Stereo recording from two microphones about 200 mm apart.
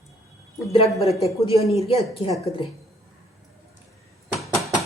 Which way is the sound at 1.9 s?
30° left (ahead or behind).